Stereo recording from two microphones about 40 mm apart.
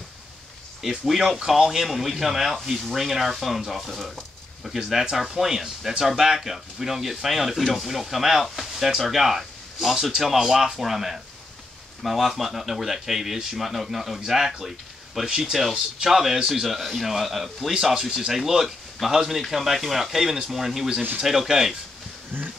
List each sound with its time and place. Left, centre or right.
0.8 s speech: centre
15.2 s speech: centre
16.6 s speech: centre
22.3 s a sound: right